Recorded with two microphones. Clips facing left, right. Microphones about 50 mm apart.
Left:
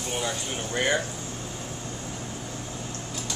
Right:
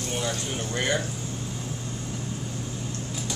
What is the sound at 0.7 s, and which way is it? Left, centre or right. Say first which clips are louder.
Speech: left 2 dB; centre.